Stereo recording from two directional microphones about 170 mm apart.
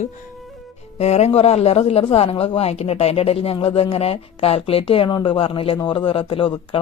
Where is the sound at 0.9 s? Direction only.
40° left (ahead or behind).